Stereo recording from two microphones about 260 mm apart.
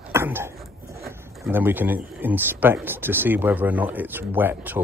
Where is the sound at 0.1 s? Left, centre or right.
Centre.